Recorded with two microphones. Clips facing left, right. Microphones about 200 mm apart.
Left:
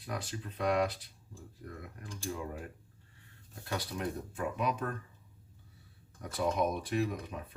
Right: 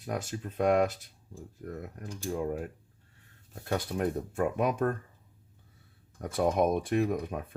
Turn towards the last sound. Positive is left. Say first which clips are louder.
# right 8 dB
turn(degrees=-50)  # may be behind; listen again after turning